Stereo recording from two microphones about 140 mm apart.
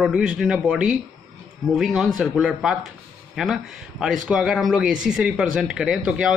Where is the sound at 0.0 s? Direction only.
5° right (ahead or behind).